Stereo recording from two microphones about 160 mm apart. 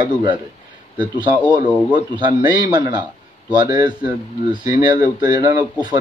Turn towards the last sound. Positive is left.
turn(degrees=-25)  # may be behind; listen again after turning